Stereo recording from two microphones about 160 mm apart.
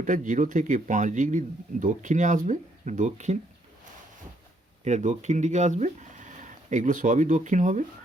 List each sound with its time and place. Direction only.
0.0 s speech: 55° right (ahead or behind)
4.8 s speech: 45° right (ahead or behind)